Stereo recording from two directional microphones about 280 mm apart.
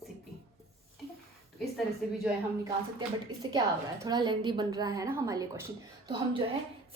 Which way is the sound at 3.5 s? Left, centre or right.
Centre.